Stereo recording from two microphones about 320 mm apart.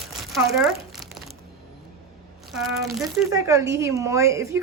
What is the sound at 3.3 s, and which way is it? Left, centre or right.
A woman's voice, centre.